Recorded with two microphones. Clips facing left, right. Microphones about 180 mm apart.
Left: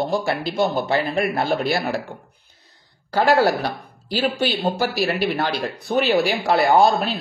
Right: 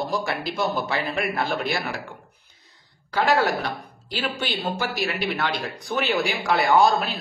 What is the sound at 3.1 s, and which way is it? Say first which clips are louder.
Speech: left 4 dB; 35° left (ahead or behind).